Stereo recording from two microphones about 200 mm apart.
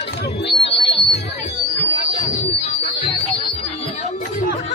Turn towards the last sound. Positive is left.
turn(degrees=35)  # may be behind; listen again after turning